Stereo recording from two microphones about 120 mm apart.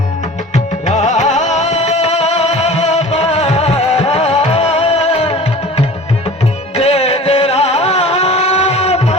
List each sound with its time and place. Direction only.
0.5 s music: 75° left (ahead or behind); by 5.4 s 55° left (ahead or behind)
6.7 s music: 60° left (ahead or behind)